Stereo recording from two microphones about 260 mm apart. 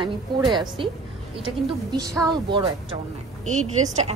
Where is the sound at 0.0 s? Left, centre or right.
Centre.